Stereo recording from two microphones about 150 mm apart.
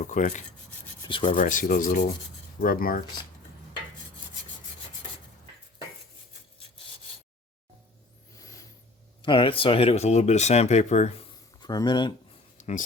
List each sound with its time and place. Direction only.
0.0 s speech: 60° left (ahead or behind)
1.0 s rub: 35° left (ahead or behind)
1.4 s speech: 65° left (ahead or behind)
8.4 s a sound: 20° left (ahead or behind)
9.2 s speech: 35° left (ahead or behind)
11.6 s speech: 25° left (ahead or behind)
12.5 s a sound: 55° left (ahead or behind)